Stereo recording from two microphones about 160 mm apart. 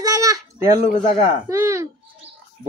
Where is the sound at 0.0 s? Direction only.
20° right (ahead or behind).